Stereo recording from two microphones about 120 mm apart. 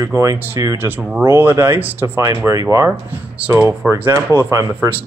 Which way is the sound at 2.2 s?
30° right (ahead or behind).